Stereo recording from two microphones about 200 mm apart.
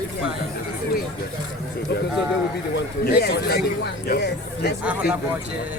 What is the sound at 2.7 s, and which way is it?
Speech, 50° left (ahead or behind).